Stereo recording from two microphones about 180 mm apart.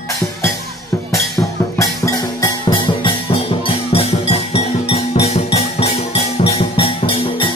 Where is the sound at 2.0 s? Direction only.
20° left (ahead or behind).